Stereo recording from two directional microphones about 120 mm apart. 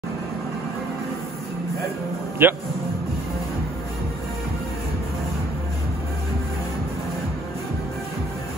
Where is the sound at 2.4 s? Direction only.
15° right (ahead or behind).